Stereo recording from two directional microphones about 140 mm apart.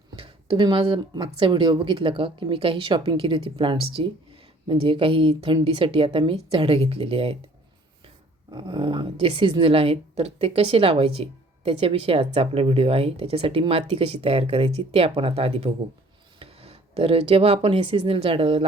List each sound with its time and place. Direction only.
0.2 s speech: 35° right (ahead or behind)